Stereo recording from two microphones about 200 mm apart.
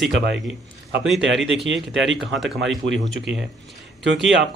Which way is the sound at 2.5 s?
65° right (ahead or behind).